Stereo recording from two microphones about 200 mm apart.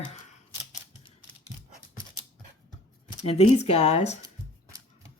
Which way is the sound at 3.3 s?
30° left (ahead or behind).